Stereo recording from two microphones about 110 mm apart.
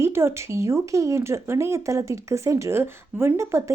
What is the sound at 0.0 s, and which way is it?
Speech, 25° right (ahead or behind).